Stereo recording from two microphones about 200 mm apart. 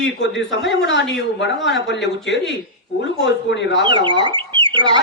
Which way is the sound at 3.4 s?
60° left (ahead or behind).